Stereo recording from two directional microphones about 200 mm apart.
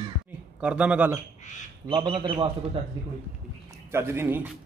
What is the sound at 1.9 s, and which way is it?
Speech, 25° right (ahead or behind).